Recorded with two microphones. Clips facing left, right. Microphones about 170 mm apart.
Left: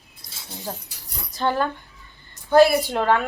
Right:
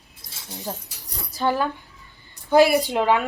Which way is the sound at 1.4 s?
10° right (ahead or behind).